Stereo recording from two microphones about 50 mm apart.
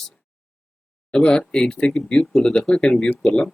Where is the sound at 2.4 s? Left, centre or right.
Left.